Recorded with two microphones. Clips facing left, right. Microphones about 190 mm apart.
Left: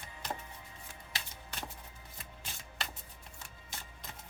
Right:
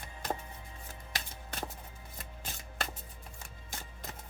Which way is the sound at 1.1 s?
45° right (ahead or behind).